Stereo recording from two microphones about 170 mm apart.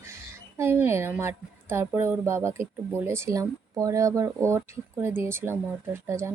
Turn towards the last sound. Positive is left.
turn(degrees=-15)  # may be behind; listen again after turning